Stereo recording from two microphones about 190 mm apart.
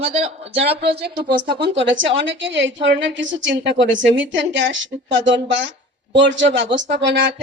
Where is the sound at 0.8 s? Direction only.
60° right (ahead or behind).